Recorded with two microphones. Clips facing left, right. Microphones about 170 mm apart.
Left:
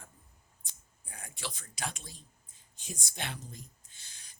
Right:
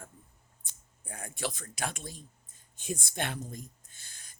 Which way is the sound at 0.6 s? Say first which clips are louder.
Right 6 dB; 50° right (ahead or behind).